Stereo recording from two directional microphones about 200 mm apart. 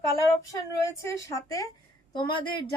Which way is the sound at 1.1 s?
15° left (ahead or behind).